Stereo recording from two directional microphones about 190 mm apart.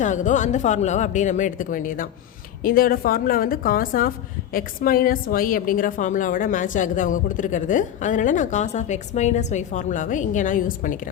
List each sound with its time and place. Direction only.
0.0 s a woman's voice: 40° left (ahead or behind)